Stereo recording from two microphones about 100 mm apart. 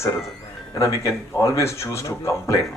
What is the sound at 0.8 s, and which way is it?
Speech, 30° left (ahead or behind).